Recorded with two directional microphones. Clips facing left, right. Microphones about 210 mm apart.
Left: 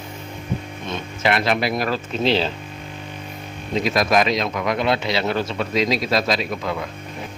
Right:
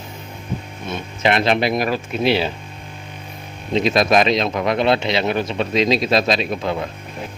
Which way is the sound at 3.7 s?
25° right (ahead or behind).